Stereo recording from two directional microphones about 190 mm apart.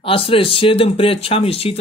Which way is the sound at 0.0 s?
30° left (ahead or behind).